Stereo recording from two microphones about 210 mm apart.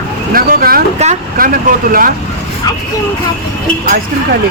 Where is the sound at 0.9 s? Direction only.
30° right (ahead or behind).